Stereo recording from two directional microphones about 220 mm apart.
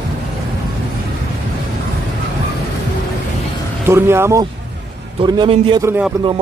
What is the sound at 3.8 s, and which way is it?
A man's voice, 10° right (ahead or behind).